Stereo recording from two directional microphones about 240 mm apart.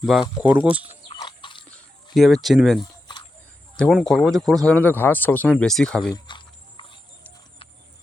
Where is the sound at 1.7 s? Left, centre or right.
Centre.